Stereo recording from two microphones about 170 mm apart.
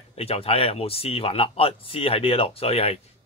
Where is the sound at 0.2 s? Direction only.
35° left (ahead or behind).